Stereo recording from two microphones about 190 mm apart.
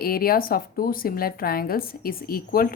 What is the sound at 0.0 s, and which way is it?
A woman's voice, 50° left (ahead or behind).